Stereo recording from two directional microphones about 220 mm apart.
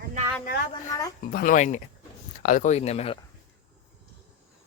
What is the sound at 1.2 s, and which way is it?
Speech, 40° left (ahead or behind).